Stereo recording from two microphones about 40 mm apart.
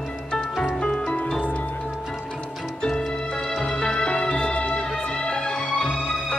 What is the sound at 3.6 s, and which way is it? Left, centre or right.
Music, left.